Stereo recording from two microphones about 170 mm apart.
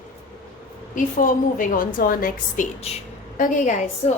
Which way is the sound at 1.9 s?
55° left (ahead or behind).